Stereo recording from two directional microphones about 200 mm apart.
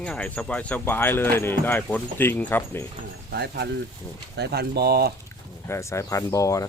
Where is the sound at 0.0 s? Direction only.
5° left (ahead or behind).